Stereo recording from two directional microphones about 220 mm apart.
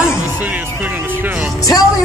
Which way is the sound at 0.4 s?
5° right (ahead or behind).